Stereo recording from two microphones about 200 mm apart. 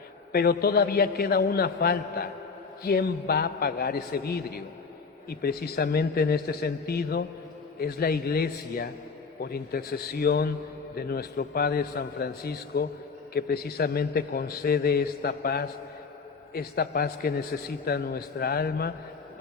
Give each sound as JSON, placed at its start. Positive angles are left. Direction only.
{"t": 0.3, "sound": "a man's voice", "side_deg": 50}